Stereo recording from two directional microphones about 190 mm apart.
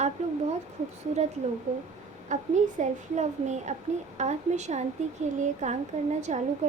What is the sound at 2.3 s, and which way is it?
Speech, 40° right (ahead or behind).